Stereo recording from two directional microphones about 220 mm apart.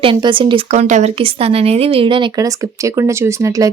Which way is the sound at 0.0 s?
20° right (ahead or behind).